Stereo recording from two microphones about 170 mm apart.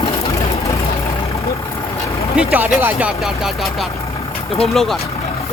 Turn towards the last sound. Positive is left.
turn(degrees=0)  # may be behind; listen again after turning